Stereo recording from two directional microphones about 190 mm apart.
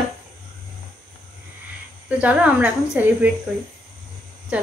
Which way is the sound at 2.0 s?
10° right (ahead or behind).